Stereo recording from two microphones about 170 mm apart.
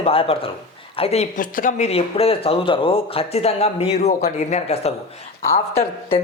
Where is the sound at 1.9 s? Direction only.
35° left (ahead or behind).